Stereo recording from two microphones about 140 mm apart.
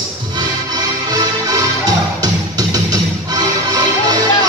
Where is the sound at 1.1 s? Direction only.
25° right (ahead or behind).